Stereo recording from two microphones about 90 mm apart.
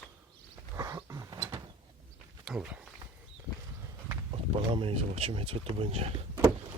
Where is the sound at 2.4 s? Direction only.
10° right (ahead or behind).